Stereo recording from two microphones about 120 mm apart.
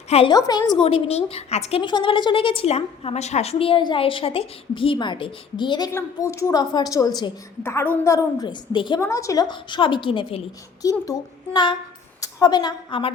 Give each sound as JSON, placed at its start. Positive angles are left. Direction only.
{"t": 0.3, "sound": "a woman's voice", "side_deg": 35}
{"t": 0.8, "sound": "a woman's voice", "side_deg": 50}
{"t": 1.8, "sound": "a woman's voice", "side_deg": 40}
{"t": 5.9, "sound": "a woman's voice", "side_deg": 25}
{"t": 7.6, "sound": "a woman's voice", "side_deg": 20}
{"t": 8.4, "sound": "a woman's voice", "side_deg": 40}
{"t": 9.0, "sound": "a woman's voice", "side_deg": 25}
{"t": 11.0, "sound": "a woman's voice", "side_deg": 35}